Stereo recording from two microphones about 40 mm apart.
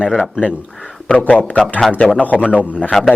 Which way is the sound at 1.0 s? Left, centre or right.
Left.